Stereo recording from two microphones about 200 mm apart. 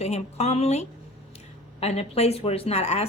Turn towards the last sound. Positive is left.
turn(degrees=30)  # may be behind; listen again after turning